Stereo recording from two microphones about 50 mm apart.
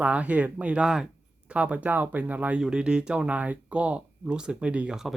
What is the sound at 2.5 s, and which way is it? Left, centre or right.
Speech, centre.